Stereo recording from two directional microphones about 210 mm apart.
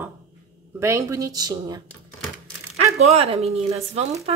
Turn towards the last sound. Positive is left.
turn(degrees=-30)  # may be behind; listen again after turning